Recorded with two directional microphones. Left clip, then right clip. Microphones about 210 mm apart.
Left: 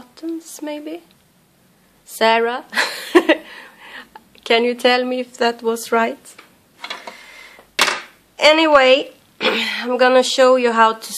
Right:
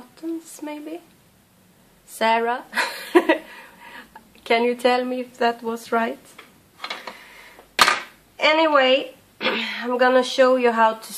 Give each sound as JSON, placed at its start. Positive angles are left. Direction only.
{"t": 0.1, "sound": "speech", "side_deg": 35}
{"t": 2.1, "sound": "speech", "side_deg": 35}
{"t": 8.4, "sound": "a woman's voice", "side_deg": 40}